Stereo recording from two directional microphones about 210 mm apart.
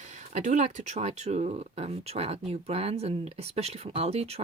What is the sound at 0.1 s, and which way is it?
Speech, 35° right (ahead or behind).